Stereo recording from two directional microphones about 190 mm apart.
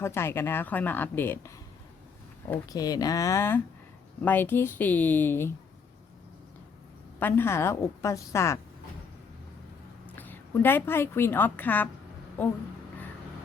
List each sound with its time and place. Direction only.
0.0 s speech: 15° left (ahead or behind)
2.5 s speech: 20° left (ahead or behind)
7.2 s speech: 10° left (ahead or behind)
10.1 s a woman's voice: 10° left (ahead or behind)